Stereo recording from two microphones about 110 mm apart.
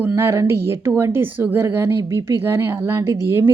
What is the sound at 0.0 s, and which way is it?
A woman's voice, 20° right (ahead or behind).